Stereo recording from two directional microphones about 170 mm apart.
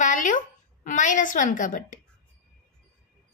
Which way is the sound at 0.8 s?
50° left (ahead or behind).